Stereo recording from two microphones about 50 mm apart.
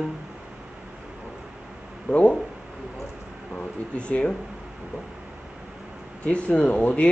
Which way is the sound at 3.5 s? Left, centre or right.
Left.